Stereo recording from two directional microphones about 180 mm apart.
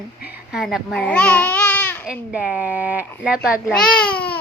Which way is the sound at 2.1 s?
5° right (ahead or behind).